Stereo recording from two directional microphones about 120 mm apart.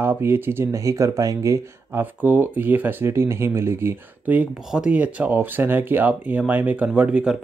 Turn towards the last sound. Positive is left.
turn(degrees=-10)  # may be behind; listen again after turning